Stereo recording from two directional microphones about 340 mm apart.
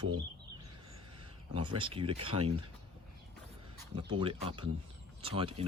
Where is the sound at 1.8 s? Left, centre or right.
Centre.